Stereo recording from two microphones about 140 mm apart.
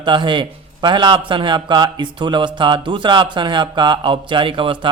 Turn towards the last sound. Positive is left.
turn(degrees=-35)  # may be behind; listen again after turning